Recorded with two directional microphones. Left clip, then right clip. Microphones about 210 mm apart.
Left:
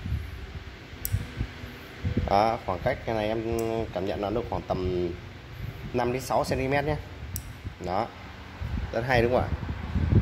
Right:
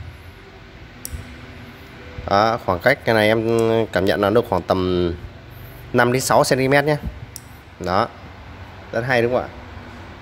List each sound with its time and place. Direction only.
2.2 s speech: 15° right (ahead or behind)
2.6 s speech: 30° right (ahead or behind)
8.9 s speech: 10° right (ahead or behind)